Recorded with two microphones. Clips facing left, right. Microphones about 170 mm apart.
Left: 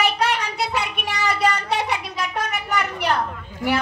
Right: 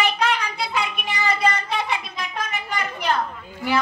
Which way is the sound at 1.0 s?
75° left (ahead or behind).